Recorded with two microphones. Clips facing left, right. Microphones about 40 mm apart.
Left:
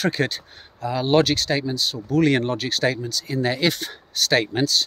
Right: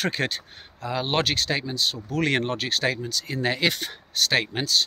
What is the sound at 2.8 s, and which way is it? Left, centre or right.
Speech, right.